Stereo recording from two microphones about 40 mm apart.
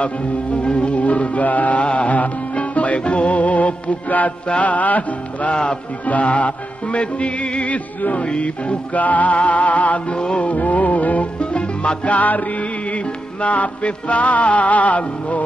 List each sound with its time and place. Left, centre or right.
0.6 s music: left
5.5 s music: left
6.0 s music: left
8.9 s music: left
10.5 s music: left